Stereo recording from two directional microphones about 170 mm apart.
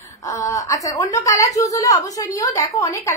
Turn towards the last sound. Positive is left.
turn(degrees=20)  # may be behind; listen again after turning